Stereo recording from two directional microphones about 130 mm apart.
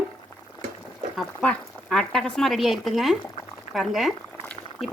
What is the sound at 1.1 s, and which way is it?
Speech, 5° left (ahead or behind).